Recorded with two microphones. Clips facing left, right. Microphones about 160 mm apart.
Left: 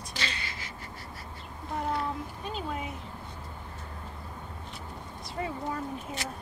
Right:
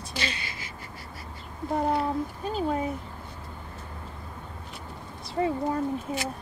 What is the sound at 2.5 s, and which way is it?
Speech, 35° right (ahead or behind).